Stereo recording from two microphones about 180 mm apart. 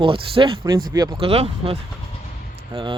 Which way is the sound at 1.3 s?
35° right (ahead or behind).